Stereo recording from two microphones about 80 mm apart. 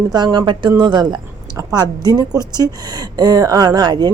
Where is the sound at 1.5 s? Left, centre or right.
Right.